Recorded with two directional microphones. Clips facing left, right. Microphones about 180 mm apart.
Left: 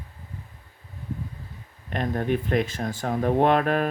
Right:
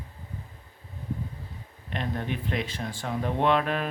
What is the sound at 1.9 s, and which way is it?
Speech, 45° left (ahead or behind).